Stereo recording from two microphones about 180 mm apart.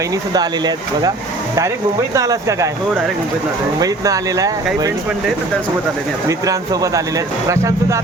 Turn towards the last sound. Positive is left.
turn(degrees=-15)  # may be behind; listen again after turning